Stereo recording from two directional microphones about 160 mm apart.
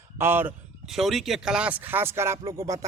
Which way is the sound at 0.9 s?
Centre (ahead or behind).